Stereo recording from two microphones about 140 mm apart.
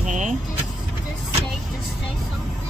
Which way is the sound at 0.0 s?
60° right (ahead or behind).